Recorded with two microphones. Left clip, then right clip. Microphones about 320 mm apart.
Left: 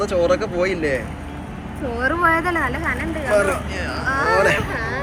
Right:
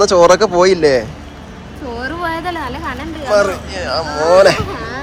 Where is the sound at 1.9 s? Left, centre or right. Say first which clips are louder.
Left 3 dB; centre.